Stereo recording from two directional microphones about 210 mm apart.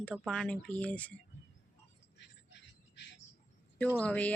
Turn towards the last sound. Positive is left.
turn(degrees=5)  # may be behind; listen again after turning